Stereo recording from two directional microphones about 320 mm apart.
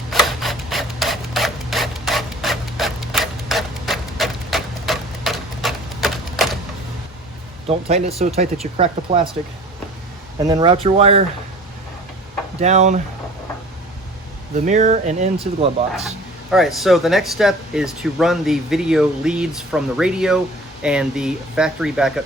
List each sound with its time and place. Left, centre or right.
0.1 s printer: centre
7.7 s speech: centre
10.4 s speech: centre
12.5 s speech: right
14.5 s speech: right
16.0 s speech: centre